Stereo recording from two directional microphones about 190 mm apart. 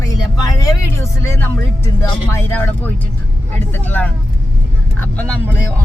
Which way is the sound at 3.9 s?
5° left (ahead or behind).